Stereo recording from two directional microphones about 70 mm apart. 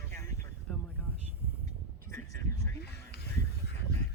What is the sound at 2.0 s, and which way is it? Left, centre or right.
Vehicle, left.